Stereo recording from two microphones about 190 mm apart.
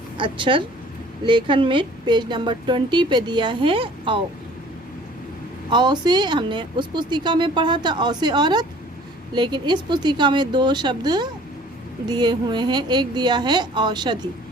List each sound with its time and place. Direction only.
0.2 s a woman's voice: 25° right (ahead or behind)
5.7 s a woman's voice: 25° right (ahead or behind)